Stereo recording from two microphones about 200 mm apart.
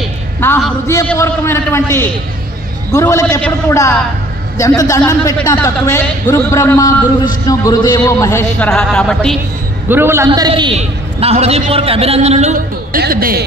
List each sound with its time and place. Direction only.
0.4 s a man's voice: 10° left (ahead or behind)
9.8 s a man's voice: 10° right (ahead or behind); by 13.4 s 45° right (ahead or behind)